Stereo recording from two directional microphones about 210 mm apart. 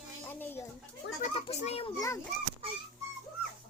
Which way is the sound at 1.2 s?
30° left (ahead or behind).